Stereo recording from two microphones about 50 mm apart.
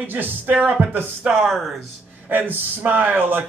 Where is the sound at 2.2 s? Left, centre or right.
Right.